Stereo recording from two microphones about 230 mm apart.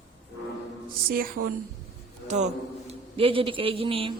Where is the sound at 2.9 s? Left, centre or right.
Right.